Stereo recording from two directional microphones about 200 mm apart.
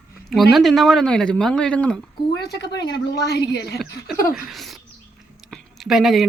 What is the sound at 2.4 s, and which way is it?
Speech, 55° left (ahead or behind).